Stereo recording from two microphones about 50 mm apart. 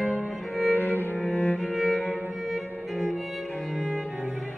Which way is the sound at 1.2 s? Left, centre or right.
Left.